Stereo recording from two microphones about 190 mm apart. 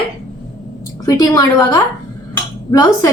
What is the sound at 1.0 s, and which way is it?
A woman's voice, 20° left (ahead or behind).